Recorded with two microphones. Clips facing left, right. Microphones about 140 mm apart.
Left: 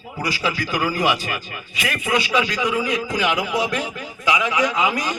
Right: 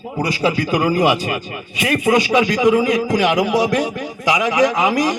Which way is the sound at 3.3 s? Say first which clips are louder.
Right 6 dB; 40° right (ahead or behind).